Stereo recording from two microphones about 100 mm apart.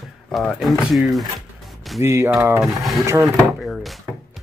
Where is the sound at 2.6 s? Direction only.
Centre (ahead or behind).